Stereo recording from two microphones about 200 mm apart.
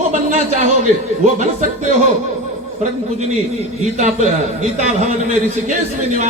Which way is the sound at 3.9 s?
35° right (ahead or behind).